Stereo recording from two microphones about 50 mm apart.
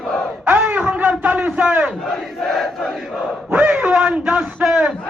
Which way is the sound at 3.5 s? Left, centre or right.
Right.